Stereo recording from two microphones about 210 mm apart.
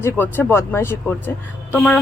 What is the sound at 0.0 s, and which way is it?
Speech, 10° left (ahead or behind).